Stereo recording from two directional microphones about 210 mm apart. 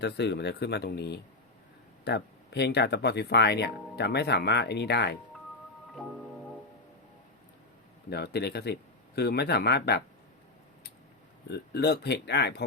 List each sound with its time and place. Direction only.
0.0 s speech: 55° left (ahead or behind)
5.9 s music: centre (ahead or behind)
8.1 s speech: 50° left (ahead or behind)
11.7 s speech: 50° left (ahead or behind)